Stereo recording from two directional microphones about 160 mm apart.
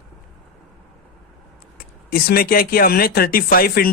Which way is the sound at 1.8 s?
65° left (ahead or behind).